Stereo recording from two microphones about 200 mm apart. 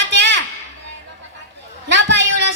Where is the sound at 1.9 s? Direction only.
60° right (ahead or behind).